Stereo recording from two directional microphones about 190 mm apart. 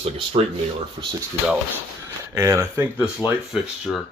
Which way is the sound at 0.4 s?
30° right (ahead or behind).